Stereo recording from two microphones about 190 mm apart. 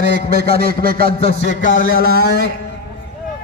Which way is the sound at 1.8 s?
50° left (ahead or behind).